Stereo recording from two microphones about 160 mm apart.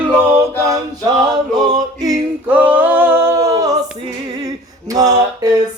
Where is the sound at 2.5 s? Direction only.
10° right (ahead or behind).